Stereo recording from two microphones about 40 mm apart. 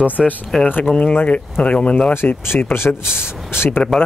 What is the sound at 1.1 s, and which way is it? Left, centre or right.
Speech, left.